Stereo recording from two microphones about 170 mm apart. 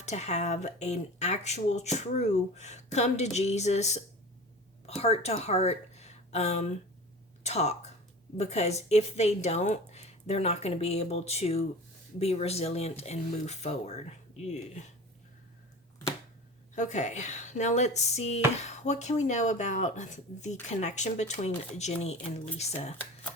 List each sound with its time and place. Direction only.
0.0 s a woman's voice: 40° left (ahead or behind)
16.7 s speech: 45° left (ahead or behind)